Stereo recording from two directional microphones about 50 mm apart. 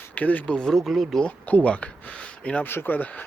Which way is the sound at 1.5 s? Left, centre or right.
Left.